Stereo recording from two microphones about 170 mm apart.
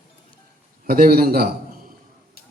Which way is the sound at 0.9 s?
60° right (ahead or behind).